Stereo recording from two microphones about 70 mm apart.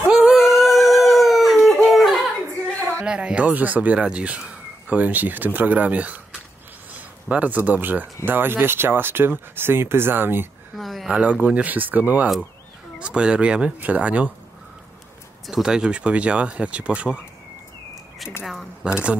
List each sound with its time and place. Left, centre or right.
0.1 s howl: centre
1.9 s a sound: centre
3.1 s speech: centre; by 10.5 s right
10.8 s speech: centre
11.1 s speech: right
15.4 s speech: centre
18.4 s speech: centre
18.9 s speech: centre